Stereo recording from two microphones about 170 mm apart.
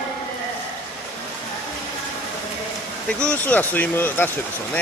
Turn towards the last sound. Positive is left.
turn(degrees=10)  # may be behind; listen again after turning